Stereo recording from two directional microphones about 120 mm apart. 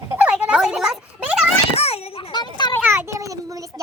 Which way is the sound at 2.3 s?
40° left (ahead or behind).